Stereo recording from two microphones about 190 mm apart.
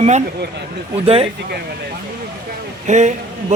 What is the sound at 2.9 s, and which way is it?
Speech, 40° right (ahead or behind).